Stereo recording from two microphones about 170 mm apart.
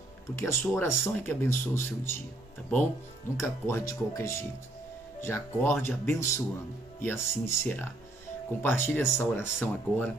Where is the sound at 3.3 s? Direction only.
15° left (ahead or behind).